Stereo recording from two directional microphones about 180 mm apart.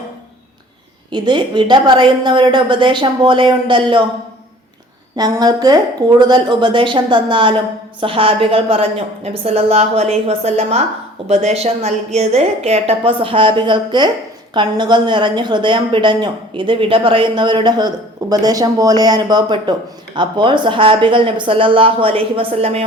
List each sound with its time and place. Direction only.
1.1 s a woman's voice: 25° right (ahead or behind)
5.1 s a woman's voice: 20° right (ahead or behind)